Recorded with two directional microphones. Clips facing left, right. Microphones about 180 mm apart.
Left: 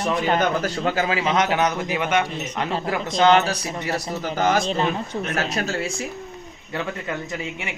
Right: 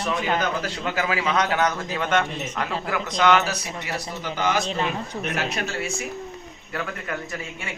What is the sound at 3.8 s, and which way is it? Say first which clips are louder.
Speech: left 5 dB; 40° left (ahead or behind).